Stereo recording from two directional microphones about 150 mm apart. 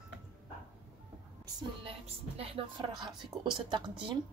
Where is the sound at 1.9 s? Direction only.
40° right (ahead or behind).